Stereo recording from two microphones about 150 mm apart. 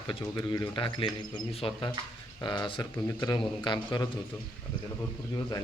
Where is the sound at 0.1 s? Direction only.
30° left (ahead or behind).